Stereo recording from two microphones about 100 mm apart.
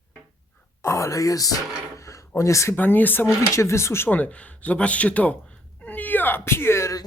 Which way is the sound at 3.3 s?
30° left (ahead or behind).